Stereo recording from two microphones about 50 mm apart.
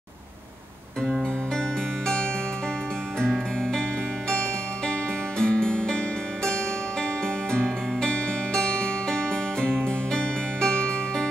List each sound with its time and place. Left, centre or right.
3.2 s music: centre